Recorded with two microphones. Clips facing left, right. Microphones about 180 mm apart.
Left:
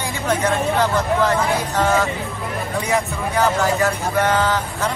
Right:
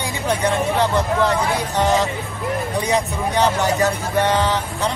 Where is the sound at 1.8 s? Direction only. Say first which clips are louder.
Right 1 dB; 15° right (ahead or behind).